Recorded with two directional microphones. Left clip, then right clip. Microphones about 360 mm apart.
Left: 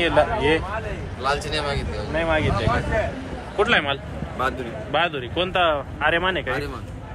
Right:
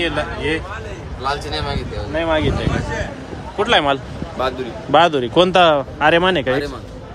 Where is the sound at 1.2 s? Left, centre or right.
Centre.